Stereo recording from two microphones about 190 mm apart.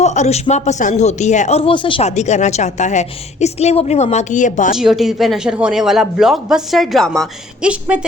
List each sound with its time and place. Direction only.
0.0 s speech: 35° left (ahead or behind)
4.7 s a man's voice: centre (ahead or behind)